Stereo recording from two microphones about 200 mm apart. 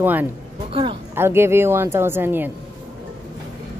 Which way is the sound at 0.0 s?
10° right (ahead or behind).